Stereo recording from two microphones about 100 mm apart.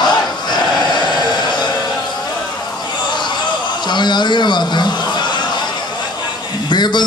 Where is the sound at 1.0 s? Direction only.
45° left (ahead or behind).